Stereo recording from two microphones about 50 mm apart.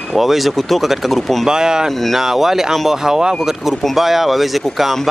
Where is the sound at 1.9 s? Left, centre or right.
Centre.